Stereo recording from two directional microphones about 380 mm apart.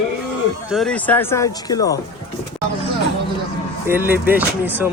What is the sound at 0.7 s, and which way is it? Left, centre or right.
Speech, centre.